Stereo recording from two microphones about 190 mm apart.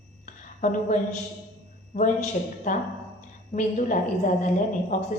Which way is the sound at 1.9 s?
50° left (ahead or behind).